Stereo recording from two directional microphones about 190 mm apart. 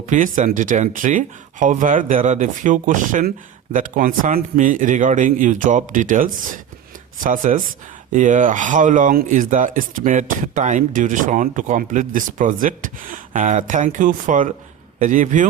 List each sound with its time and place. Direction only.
0.1 s a man's voice: 40° right (ahead or behind)